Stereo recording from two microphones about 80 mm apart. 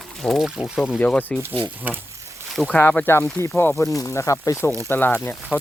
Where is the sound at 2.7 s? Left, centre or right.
Left.